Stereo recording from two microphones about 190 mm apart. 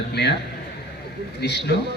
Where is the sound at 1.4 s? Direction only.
60° left (ahead or behind).